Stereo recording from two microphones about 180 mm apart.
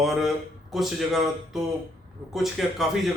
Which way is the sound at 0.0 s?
Centre (ahead or behind).